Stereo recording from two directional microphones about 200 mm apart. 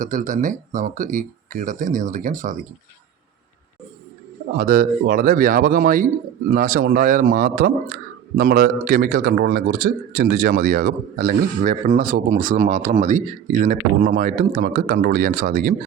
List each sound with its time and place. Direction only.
0.0 s speech: 40° right (ahead or behind)
4.5 s a man's voice: 45° right (ahead or behind)